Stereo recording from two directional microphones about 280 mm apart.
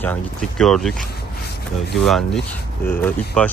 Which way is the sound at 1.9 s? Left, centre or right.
Centre.